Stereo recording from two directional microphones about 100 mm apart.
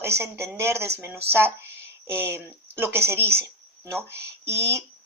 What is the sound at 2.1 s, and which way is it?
A woman's voice, 25° right (ahead or behind).